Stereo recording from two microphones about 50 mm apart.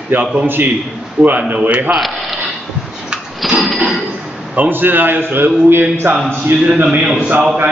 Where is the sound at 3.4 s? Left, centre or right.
Centre.